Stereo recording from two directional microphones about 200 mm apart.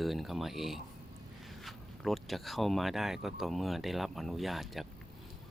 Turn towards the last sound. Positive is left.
turn(degrees=0)  # may be behind; listen again after turning